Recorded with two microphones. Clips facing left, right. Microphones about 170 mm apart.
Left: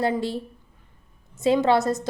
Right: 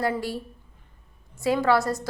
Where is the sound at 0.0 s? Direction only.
25° left (ahead or behind).